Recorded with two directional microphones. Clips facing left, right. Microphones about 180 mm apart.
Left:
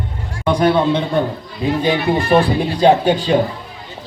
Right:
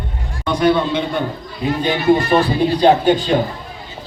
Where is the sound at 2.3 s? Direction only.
10° left (ahead or behind).